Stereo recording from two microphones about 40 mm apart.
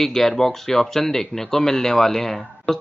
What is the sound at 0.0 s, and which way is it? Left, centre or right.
Speech, centre.